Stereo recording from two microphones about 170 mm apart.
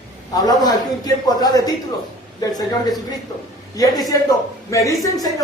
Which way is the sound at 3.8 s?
20° left (ahead or behind).